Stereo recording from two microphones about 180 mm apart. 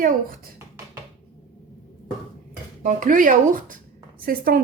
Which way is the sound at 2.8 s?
50° right (ahead or behind).